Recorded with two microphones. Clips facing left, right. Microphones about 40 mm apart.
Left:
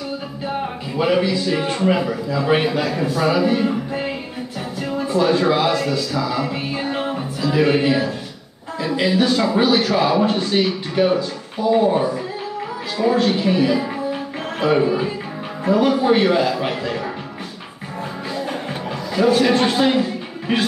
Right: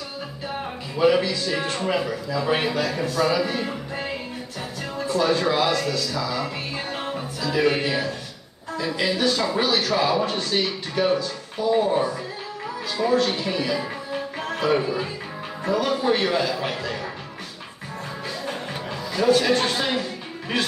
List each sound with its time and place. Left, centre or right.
0.9 s a man's voice: centre
5.0 s a man's voice: centre
18.7 s a sound: centre